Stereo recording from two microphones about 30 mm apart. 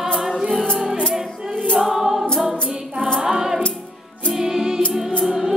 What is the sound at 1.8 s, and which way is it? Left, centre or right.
Choir, centre.